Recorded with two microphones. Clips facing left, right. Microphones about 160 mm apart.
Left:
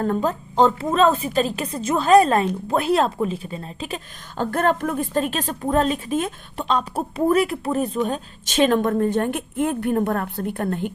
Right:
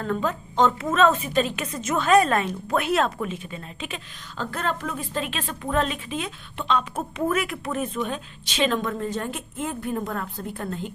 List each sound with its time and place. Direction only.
0.0 s a woman's voice: 40° left (ahead or behind)
4.4 s a woman's voice: 55° left (ahead or behind)